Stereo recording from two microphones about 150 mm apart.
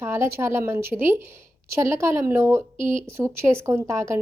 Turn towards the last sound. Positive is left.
turn(degrees=-15)  # may be behind; listen again after turning